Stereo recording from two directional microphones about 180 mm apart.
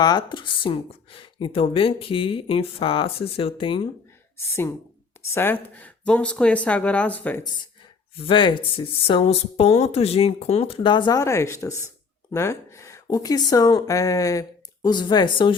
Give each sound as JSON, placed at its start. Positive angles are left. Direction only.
{"t": 0.0, "sound": "speech", "side_deg": 25}
{"t": 4.4, "sound": "speech", "side_deg": 15}
{"t": 8.1, "sound": "speech", "side_deg": 30}